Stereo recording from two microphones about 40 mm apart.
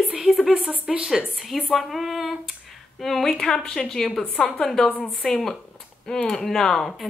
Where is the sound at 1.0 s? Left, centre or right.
Centre.